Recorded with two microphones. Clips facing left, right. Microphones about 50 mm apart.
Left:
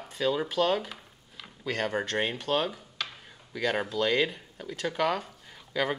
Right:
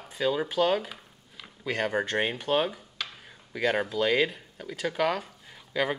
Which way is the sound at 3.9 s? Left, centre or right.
Centre.